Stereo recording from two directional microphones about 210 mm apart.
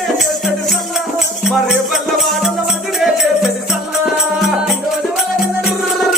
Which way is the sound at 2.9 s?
Centre (ahead or behind).